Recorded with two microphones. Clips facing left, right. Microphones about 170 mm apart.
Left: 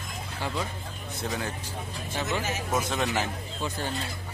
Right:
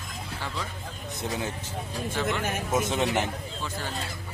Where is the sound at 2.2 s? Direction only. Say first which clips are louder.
Even; 55° right (ahead or behind).